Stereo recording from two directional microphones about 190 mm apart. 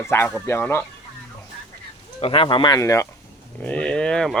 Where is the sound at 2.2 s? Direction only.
30° left (ahead or behind); by 4.4 s 5° left (ahead or behind).